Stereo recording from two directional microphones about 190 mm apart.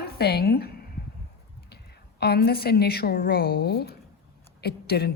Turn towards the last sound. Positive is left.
turn(degrees=60)  # may be behind; listen again after turning